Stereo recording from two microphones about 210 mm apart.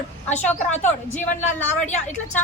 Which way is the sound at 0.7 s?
35° left (ahead or behind).